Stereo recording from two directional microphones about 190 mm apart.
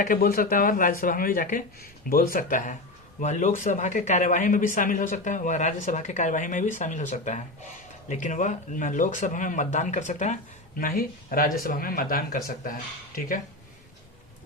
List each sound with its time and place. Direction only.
0.0 s speech: 50° left (ahead or behind)